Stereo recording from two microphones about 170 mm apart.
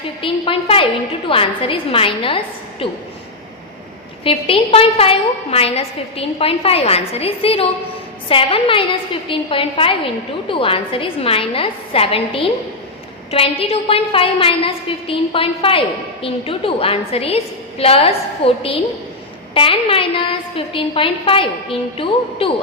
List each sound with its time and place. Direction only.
0.2 s a woman's voice: 30° left (ahead or behind)
4.2 s a woman's voice: 30° left (ahead or behind)